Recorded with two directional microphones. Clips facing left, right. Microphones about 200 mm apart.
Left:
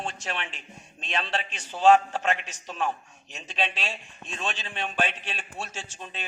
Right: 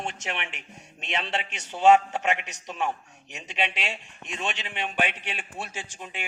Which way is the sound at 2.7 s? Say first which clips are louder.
Even; 15° right (ahead or behind).